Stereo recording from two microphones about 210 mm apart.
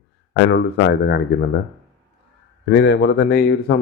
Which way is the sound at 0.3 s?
55° left (ahead or behind).